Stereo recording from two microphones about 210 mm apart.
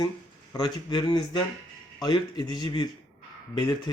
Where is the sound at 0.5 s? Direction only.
20° left (ahead or behind).